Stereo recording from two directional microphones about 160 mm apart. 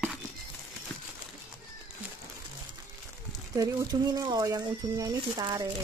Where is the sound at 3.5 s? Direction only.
20° right (ahead or behind).